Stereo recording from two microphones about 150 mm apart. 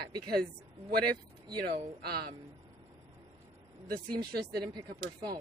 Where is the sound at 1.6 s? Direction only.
90° right.